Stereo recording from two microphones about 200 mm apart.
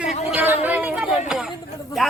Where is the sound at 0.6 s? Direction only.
10° right (ahead or behind).